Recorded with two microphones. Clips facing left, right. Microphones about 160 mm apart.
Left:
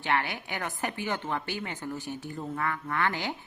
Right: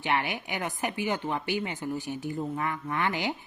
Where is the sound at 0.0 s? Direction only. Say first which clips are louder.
Right 1 dB; 15° right (ahead or behind).